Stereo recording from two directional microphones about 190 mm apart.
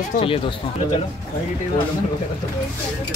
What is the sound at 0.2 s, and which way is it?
Speech, 30° left (ahead or behind).